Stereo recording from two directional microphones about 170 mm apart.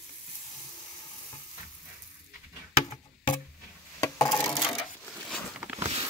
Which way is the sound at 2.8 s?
30° left (ahead or behind).